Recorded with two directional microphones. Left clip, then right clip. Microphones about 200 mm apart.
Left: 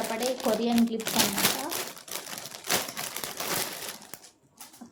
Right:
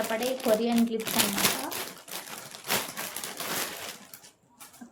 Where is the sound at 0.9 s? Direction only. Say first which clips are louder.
Left 1 dB; 10° left (ahead or behind).